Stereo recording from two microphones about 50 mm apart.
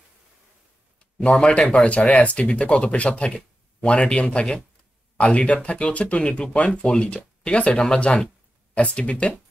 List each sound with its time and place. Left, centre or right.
1.2 s speech: left